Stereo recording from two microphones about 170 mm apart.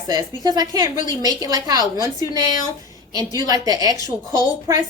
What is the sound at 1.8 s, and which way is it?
Speech, 20° left (ahead or behind).